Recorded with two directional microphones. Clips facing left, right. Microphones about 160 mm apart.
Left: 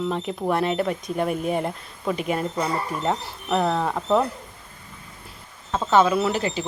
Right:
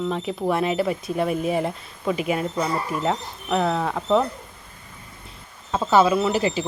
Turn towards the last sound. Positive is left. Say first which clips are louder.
# right 1 dB
turn(degrees=-5)  # may be behind; listen again after turning